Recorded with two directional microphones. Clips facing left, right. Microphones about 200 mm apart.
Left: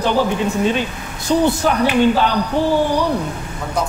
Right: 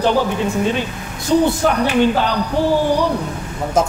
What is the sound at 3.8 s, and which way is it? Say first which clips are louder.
Speech: right 5 dB; 45° right (ahead or behind).